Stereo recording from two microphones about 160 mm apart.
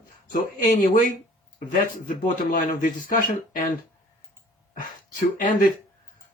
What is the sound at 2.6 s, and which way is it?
Speech, 60° left (ahead or behind).